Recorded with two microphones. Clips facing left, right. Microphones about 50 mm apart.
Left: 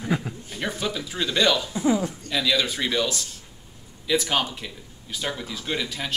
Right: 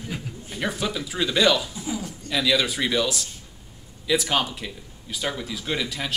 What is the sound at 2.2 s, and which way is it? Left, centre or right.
Speech, centre.